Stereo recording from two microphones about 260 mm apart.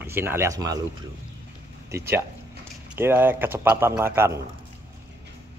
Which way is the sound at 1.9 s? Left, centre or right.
Centre.